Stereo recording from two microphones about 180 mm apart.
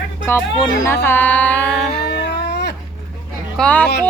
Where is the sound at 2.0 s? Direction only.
65° left (ahead or behind).